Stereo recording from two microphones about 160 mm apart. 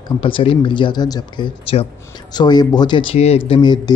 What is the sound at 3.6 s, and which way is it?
Speech, 25° left (ahead or behind).